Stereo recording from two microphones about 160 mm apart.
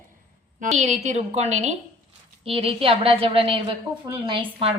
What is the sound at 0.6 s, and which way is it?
A woman's voice, 45° right (ahead or behind).